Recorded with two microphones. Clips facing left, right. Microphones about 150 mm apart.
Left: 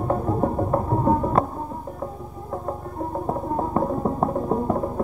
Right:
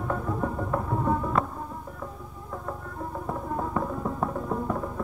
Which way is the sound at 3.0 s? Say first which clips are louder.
Left 7 dB; 35° left (ahead or behind).